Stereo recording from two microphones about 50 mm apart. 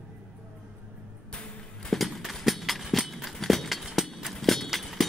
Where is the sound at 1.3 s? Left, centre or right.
Centre.